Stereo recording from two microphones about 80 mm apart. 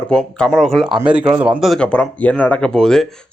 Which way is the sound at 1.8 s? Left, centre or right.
Centre.